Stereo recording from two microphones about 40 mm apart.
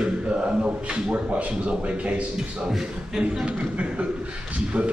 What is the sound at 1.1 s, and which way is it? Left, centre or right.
Speech, right.